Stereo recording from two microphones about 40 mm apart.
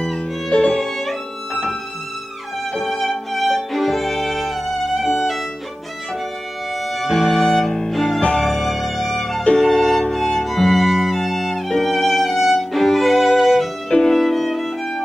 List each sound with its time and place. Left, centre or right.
0.5 s violin: left
2.7 s music: centre
6.9 s music: centre
7.6 s music: centre
7.9 s music: centre
13.8 s music: centre